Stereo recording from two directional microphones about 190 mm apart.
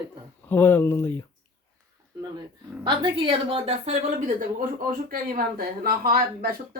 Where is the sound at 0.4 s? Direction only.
10° left (ahead or behind).